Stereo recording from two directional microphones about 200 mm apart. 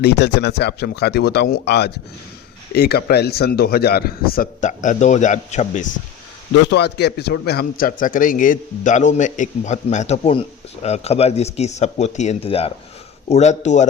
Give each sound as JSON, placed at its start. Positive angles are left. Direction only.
{"t": 0.0, "sound": "a man's voice", "side_deg": 55}
{"t": 6.7, "sound": "a man's voice", "side_deg": 55}